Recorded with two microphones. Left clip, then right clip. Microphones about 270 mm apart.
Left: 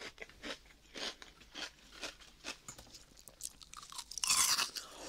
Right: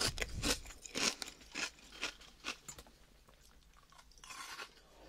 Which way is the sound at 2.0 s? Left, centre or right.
Centre.